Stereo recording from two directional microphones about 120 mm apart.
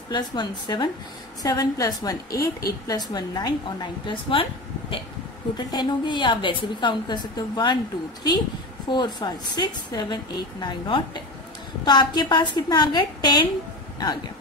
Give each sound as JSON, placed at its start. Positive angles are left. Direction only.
{"t": 0.1, "sound": "a woman's voice", "side_deg": 40}
{"t": 5.7, "sound": "a woman's voice", "side_deg": 35}
{"t": 8.8, "sound": "a woman's voice", "side_deg": 40}